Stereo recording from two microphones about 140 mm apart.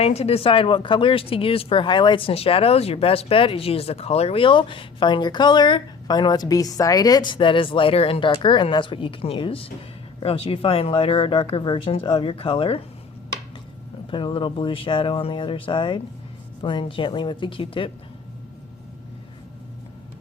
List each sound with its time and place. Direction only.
0.0 s speech: 50° left (ahead or behind)
14.1 s speech: 35° left (ahead or behind)